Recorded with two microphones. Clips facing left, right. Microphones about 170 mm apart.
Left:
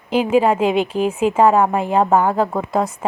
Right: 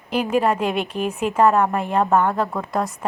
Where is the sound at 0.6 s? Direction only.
90° left.